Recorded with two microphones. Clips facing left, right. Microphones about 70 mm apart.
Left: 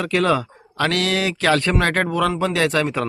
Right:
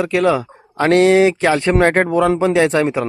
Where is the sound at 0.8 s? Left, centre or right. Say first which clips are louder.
Right 10 dB; right.